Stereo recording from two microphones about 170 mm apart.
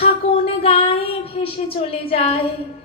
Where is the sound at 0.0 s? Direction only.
35° left (ahead or behind).